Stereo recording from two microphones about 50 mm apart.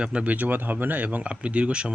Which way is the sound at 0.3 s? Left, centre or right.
Right.